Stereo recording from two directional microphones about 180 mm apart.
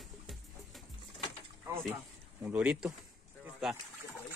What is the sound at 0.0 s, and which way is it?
Music, centre (ahead or behind).